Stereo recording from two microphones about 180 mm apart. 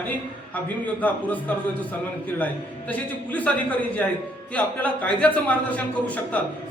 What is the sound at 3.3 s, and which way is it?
A man's voice, 10° left (ahead or behind).